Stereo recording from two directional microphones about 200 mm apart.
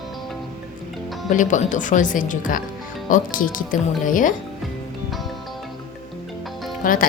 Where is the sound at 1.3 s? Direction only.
40° left (ahead or behind).